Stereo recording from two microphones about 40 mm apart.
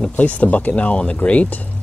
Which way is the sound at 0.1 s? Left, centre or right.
Left.